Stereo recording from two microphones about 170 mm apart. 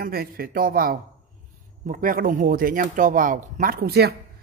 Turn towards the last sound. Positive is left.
turn(degrees=-70)  # may be behind; listen again after turning